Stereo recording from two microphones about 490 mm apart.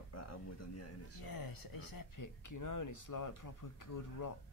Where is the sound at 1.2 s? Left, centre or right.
Left.